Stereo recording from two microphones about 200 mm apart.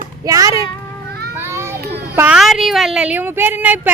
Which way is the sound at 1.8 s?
50° right (ahead or behind).